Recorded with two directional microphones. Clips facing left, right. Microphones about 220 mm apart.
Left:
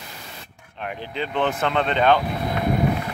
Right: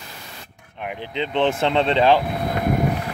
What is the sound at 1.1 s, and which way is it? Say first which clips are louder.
Speech: right 3 dB; 25° right (ahead or behind).